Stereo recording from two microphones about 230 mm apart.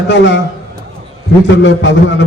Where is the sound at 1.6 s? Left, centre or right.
Left.